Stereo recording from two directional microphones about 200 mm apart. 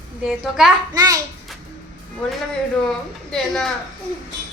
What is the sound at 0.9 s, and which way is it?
Speech, 15° right (ahead or behind).